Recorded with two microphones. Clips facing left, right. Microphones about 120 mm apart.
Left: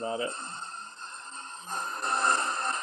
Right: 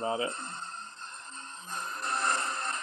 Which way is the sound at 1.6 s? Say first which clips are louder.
Left 3 dB; 35° left (ahead or behind).